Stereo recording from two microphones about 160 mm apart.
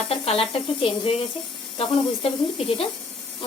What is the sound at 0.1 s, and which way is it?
Speech, 35° left (ahead or behind).